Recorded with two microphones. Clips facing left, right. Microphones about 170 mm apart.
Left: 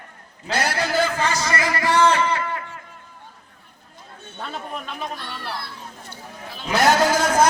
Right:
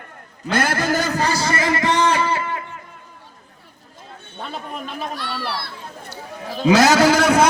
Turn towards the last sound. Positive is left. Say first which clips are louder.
# right 3 dB
turn(degrees=-65)  # may be behind; listen again after turning